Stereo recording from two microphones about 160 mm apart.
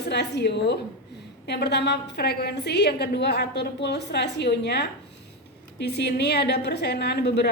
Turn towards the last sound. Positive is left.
turn(degrees=90)